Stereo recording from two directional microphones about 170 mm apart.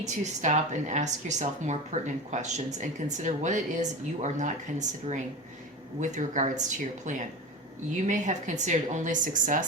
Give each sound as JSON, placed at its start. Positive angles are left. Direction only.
{"t": 0.0, "sound": "speech", "side_deg": -45}